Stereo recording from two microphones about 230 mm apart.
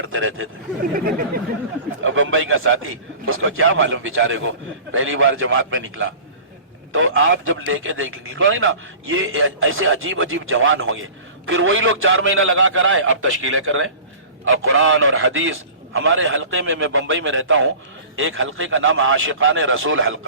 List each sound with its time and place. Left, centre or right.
0.1 s a man's voice: right
0.9 s a sound: right
2.0 s a man's voice: right